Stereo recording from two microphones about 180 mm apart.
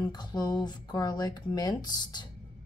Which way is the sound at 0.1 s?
25° left (ahead or behind).